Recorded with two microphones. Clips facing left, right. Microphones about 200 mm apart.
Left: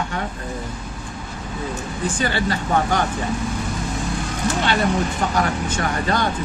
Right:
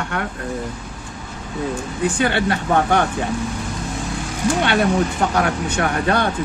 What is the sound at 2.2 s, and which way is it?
Speech, 60° right (ahead or behind).